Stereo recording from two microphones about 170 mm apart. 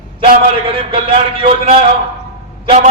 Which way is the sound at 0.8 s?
35° right (ahead or behind).